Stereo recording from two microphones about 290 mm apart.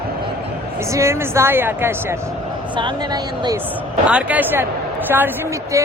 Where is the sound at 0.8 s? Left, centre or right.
Centre.